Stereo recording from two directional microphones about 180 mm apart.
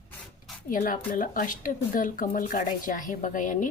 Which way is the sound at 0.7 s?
50° left (ahead or behind).